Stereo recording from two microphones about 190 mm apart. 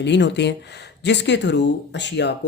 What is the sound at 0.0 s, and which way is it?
Speech, 65° left (ahead or behind).